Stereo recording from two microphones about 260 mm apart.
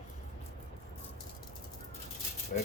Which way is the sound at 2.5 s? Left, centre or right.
Left.